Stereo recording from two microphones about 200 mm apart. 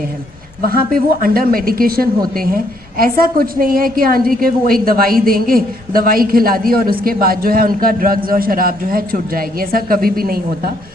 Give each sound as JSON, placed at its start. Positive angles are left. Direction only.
{"t": 0.6, "sound": "a woman's voice", "side_deg": -45}